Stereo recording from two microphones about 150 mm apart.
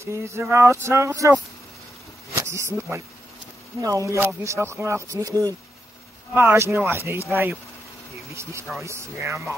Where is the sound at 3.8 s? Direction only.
20° right (ahead or behind).